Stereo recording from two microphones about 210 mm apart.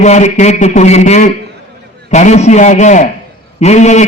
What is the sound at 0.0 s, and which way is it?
A man's voice, 35° left (ahead or behind).